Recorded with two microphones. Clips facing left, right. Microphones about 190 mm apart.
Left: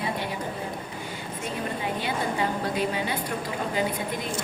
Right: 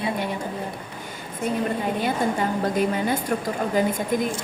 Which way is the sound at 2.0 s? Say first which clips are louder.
Right 3 dB; 45° right (ahead or behind).